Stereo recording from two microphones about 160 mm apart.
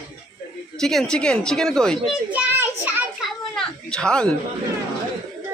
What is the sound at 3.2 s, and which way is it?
Children playing, centre (ahead or behind).